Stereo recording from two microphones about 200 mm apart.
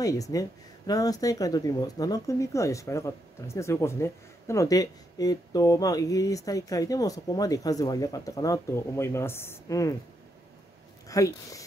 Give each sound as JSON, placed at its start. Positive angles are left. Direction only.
{"t": 0.0, "sound": "speech", "side_deg": 15}
{"t": 11.1, "sound": "speech", "side_deg": 15}